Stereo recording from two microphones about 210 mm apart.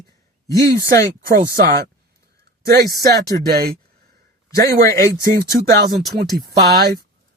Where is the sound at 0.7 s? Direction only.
45° right (ahead or behind).